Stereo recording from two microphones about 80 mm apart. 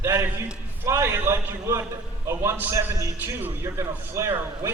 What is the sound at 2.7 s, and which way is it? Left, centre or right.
Speech, right.